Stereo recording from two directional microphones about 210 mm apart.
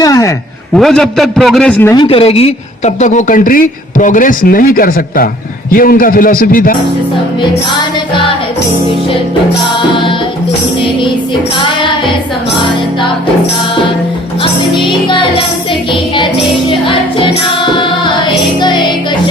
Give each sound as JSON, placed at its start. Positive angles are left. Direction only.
{"t": 0.0, "sound": "a man's voice", "side_deg": 15}
{"t": 0.7, "sound": "a man's voice", "side_deg": 0}
{"t": 2.0, "sound": "a man's voice", "side_deg": 25}
{"t": 9.9, "sound": "music", "side_deg": 25}
{"t": 15.0, "sound": "music", "side_deg": 25}
{"t": 16.6, "sound": "music", "side_deg": 25}
{"t": 18.6, "sound": "music", "side_deg": 20}